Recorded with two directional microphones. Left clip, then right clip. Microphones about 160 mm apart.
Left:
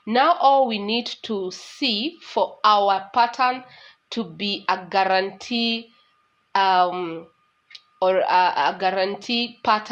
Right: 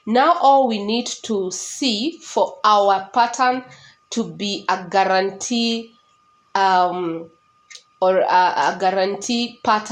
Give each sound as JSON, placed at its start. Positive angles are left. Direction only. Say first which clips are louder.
{"t": 0.0, "sound": "speech", "louder": "right 2 dB", "side_deg": 40}